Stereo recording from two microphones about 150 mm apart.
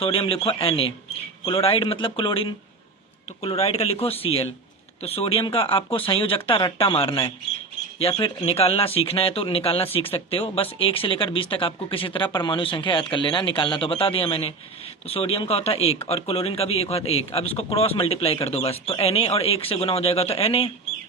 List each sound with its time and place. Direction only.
0.0 s speech: 40° left (ahead or behind)